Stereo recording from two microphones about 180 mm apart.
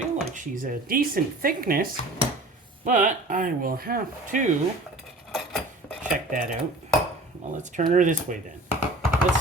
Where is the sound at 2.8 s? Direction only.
45° right (ahead or behind).